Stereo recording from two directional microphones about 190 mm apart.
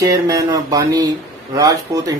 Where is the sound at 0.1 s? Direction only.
20° right (ahead or behind).